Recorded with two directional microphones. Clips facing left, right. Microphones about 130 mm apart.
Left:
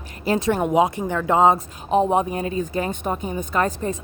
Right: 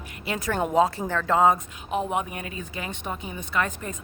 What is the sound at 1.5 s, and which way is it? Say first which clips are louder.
A woman's voice: left 8 dB; 30° left (ahead or behind).